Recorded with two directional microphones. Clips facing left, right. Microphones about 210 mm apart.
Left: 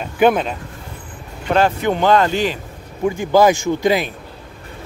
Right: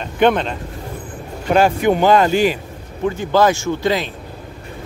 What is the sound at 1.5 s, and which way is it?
Speech, 10° right (ahead or behind).